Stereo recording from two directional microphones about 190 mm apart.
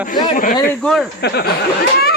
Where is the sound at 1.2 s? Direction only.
60° left (ahead or behind).